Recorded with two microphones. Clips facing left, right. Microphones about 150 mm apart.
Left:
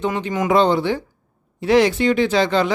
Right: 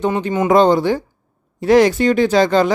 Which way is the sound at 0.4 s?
45° right (ahead or behind).